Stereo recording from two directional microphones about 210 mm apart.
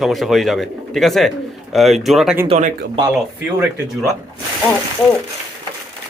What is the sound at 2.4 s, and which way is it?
Speech, 25° right (ahead or behind).